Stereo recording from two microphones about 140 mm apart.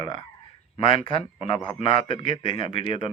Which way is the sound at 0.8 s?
40° left (ahead or behind).